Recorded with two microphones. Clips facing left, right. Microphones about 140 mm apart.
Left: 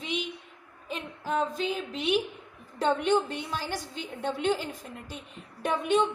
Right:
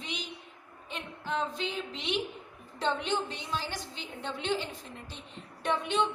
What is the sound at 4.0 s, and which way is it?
Speech, 45° left (ahead or behind).